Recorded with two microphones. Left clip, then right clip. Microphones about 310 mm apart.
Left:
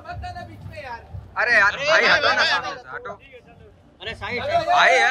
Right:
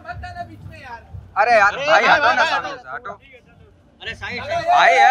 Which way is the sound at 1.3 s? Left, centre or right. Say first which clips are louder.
Right 3 dB; centre.